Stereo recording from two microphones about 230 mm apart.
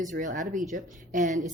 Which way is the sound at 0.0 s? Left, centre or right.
Right.